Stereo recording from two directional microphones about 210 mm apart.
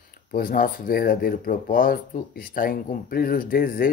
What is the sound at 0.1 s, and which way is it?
Speech, 45° left (ahead or behind).